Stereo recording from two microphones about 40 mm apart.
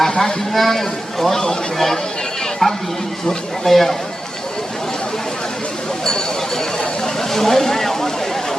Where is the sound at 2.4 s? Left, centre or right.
Centre.